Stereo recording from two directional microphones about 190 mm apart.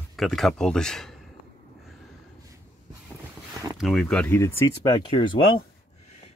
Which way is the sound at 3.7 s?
Centre (ahead or behind).